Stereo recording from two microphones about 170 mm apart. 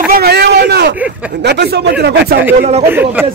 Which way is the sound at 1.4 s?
75° right (ahead or behind).